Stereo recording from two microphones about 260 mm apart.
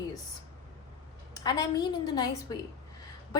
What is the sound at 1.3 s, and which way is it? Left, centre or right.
A woman's voice, centre.